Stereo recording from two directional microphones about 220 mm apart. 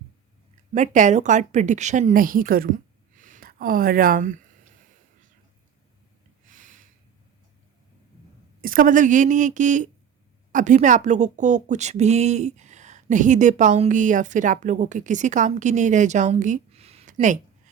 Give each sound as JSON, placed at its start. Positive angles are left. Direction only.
{"t": 0.7, "sound": "speech", "side_deg": -35}
{"t": 6.5, "sound": "a sound", "side_deg": -35}
{"t": 8.6, "sound": "speech", "side_deg": -40}